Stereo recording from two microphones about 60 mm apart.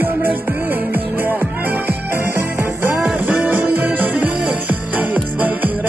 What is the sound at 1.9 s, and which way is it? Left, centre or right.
Music, right.